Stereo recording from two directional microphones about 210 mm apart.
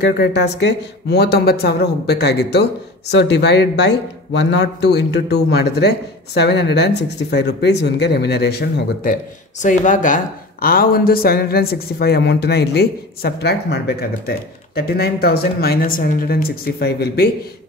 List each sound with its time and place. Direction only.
0.0 s a man's voice: 55° left (ahead or behind)